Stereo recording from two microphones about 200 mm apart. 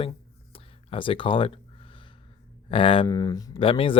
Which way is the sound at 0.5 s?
25° left (ahead or behind).